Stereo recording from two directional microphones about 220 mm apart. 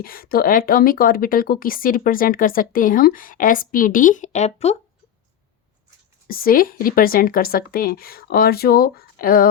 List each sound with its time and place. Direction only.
0.0 s speech: 40° left (ahead or behind)
6.2 s speech: 40° left (ahead or behind)